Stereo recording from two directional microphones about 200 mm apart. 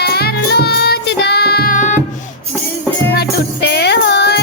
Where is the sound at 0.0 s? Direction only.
55° left (ahead or behind).